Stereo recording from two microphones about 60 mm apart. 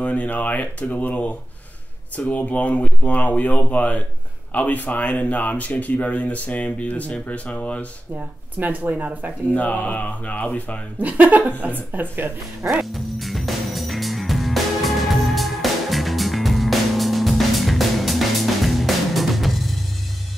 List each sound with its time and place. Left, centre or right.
0.0 s speech: left
8.5 s speech: right
9.5 s speech: left
11.0 s speech: right
12.8 s music: centre